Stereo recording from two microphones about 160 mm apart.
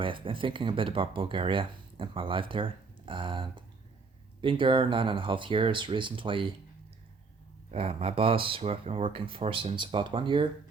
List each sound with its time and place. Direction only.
0.0 s speech: 30° right (ahead or behind)
7.7 s speech: 40° right (ahead or behind)